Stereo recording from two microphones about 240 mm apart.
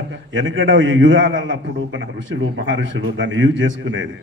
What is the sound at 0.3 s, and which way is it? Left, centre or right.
A man's voice, right.